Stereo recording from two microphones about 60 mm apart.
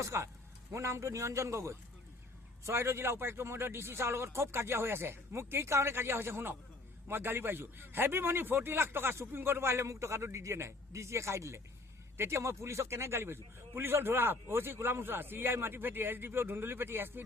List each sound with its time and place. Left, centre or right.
0.0 s a man's voice: right